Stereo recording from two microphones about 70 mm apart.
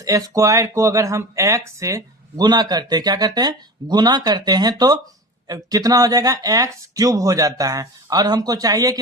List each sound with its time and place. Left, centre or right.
0.0 s speech: right
2.3 s speech: right
5.5 s speech: right